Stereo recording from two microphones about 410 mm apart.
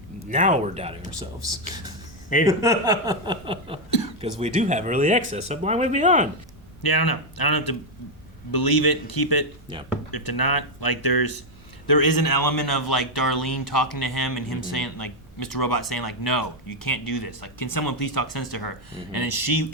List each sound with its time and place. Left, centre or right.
0.3 s speech: centre
6.8 s speech: left
15.5 s speech: left